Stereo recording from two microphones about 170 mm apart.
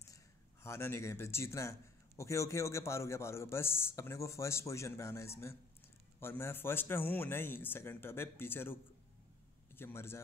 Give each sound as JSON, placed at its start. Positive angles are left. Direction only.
{"t": 0.0, "sound": "a man's voice", "side_deg": 15}
{"t": 9.8, "sound": "a man's voice", "side_deg": 15}